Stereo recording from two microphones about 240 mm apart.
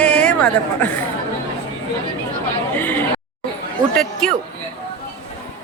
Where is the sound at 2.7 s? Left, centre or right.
Centre.